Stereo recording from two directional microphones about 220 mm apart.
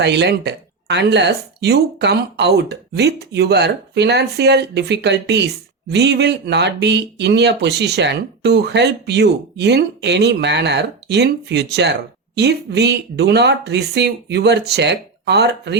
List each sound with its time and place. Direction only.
0.0 s speech: 50° right (ahead or behind)